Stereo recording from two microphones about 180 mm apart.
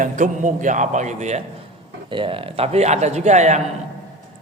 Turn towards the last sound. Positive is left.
turn(degrees=-40)  # may be behind; listen again after turning